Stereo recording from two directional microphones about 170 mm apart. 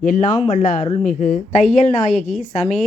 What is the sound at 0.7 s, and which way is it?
A woman's voice, 45° left (ahead or behind).